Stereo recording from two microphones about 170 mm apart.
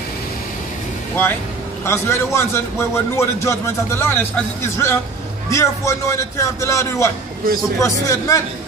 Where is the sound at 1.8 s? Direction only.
15° left (ahead or behind).